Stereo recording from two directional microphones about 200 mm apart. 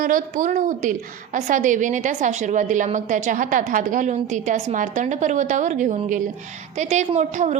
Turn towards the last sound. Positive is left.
turn(degrees=-35)  # may be behind; listen again after turning